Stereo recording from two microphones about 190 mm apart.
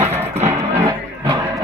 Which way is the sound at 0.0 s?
10° right (ahead or behind).